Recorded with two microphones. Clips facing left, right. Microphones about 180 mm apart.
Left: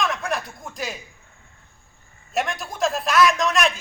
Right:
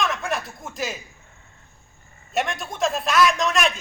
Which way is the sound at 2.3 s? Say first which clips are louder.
Even; centre (ahead or behind).